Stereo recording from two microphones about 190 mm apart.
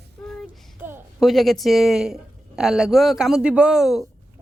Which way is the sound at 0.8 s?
10° right (ahead or behind).